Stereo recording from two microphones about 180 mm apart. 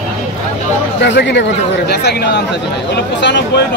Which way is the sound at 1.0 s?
75° left (ahead or behind).